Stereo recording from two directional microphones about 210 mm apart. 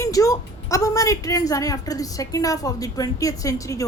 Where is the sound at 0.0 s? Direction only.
15° left (ahead or behind).